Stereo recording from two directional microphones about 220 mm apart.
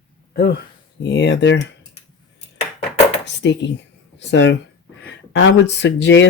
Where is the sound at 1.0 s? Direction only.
50° left (ahead or behind).